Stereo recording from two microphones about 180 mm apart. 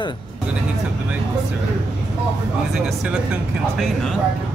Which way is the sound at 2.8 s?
Centre (ahead or behind).